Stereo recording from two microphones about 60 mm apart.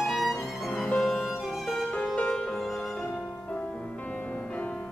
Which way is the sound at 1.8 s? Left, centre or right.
Centre.